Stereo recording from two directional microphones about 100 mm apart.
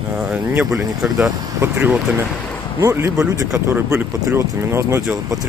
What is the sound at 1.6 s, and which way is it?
Speech, 20° right (ahead or behind).